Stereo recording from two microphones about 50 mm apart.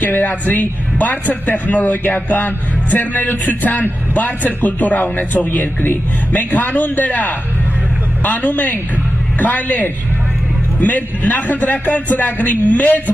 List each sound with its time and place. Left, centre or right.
0.0 s speech: left